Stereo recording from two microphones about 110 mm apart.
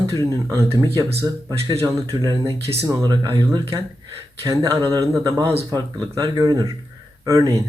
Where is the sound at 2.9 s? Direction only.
35° right (ahead or behind).